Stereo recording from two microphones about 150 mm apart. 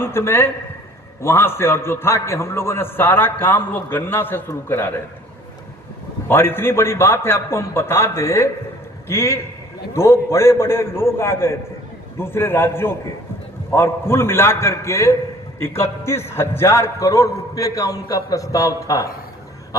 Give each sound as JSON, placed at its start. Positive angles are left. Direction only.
{"t": 0.0, "sound": "a man's voice", "side_deg": 15}
{"t": 6.2, "sound": "a man's voice", "side_deg": 15}